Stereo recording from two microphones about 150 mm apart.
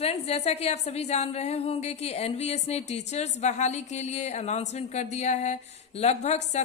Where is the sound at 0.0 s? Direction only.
45° left (ahead or behind).